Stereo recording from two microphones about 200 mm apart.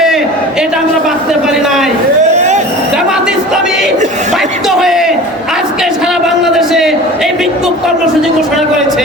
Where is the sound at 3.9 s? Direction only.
35° right (ahead or behind).